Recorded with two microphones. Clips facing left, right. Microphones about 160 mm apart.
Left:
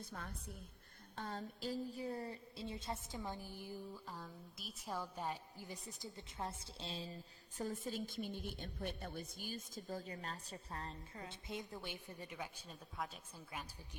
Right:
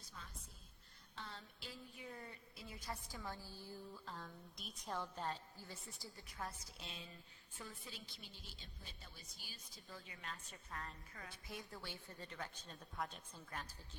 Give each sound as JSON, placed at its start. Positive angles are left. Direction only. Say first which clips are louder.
{"t": 0.0, "sound": "a woman's voice", "louder": "left 9 dB", "side_deg": 55}
{"t": 1.1, "sound": "a woman's voice", "louder": "left 8 dB", "side_deg": 45}